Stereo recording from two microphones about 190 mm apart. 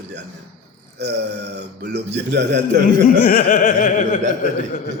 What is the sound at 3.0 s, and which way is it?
Speech, 50° left (ahead or behind).